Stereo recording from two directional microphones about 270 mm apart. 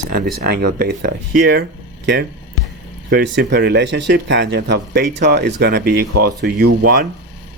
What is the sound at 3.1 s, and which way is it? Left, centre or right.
Speech, right.